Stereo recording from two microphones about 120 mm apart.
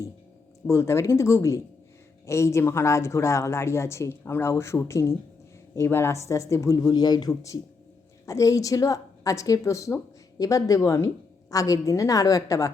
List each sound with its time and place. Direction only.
0.7 s speech: 25° left (ahead or behind)